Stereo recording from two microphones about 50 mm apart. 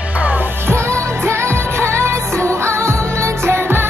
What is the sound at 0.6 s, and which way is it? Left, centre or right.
Music, right.